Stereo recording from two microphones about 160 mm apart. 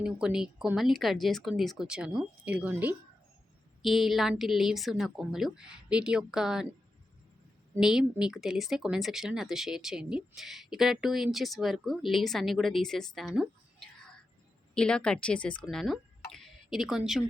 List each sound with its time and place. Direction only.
0.0 s speech: 5° right (ahead or behind)
7.8 s speech: 5° right (ahead or behind)